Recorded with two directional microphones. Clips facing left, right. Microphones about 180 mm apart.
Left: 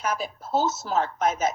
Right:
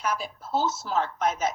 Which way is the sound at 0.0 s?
45° left (ahead or behind).